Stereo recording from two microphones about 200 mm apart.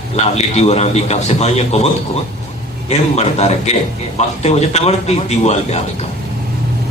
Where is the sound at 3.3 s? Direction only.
30° left (ahead or behind).